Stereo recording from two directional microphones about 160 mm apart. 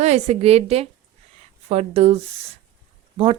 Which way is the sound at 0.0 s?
45° right (ahead or behind).